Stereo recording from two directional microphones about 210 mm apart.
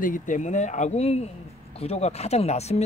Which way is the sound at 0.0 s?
40° left (ahead or behind).